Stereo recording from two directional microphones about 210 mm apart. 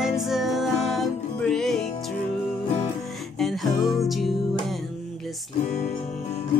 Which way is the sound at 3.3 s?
Centre (ahead or behind).